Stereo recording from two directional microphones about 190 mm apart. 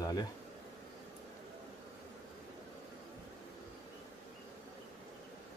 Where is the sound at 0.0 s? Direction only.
20° left (ahead or behind).